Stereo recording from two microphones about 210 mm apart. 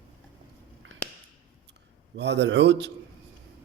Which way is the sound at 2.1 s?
55° right (ahead or behind).